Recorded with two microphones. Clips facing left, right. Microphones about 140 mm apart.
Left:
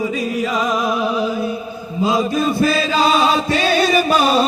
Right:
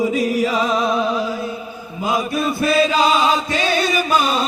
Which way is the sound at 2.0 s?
25° left (ahead or behind).